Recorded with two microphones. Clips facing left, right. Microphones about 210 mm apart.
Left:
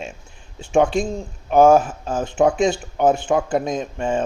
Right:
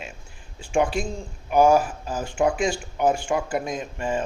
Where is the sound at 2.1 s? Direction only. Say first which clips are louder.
Left 7 dB; 20° left (ahead or behind).